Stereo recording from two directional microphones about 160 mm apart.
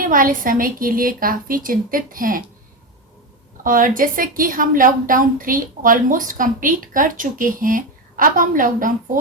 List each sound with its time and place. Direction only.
0.1 s a woman's voice: 60° right (ahead or behind)
3.6 s a woman's voice: 60° right (ahead or behind)